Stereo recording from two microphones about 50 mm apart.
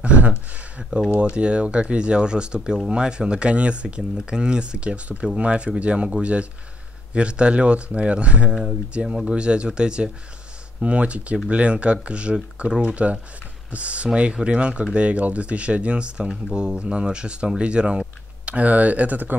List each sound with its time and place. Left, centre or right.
0.0 s a sound: right
1.2 s speech: right
7.2 s speech: right